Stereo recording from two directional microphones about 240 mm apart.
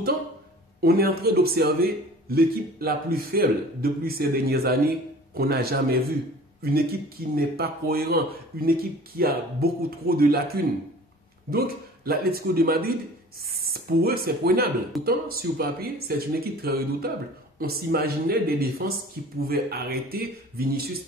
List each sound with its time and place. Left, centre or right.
0.7 s a man's voice: right
7.3 s a man's voice: right